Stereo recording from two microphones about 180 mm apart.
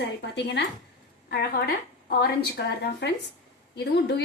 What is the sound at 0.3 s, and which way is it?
Speech, 70° left (ahead or behind).